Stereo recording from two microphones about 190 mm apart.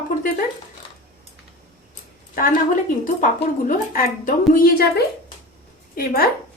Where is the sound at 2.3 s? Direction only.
45° left (ahead or behind).